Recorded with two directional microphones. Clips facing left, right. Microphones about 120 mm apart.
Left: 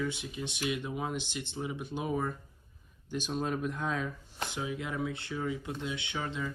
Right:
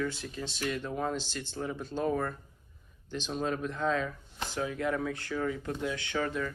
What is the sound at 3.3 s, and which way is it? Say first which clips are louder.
Speech: right 1 dB; 5° left (ahead or behind).